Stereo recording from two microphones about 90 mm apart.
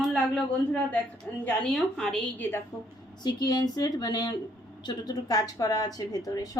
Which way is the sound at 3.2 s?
50° left (ahead or behind).